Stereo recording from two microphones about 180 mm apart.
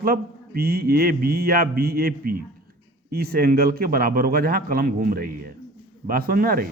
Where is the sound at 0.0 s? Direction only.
55° right (ahead or behind).